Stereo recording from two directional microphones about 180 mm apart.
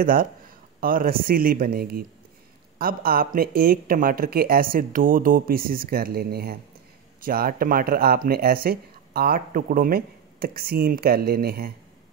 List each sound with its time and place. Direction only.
0.0 s speech: 55° right (ahead or behind)